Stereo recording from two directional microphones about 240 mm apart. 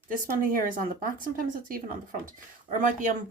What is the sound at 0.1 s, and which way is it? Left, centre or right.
Speech, right.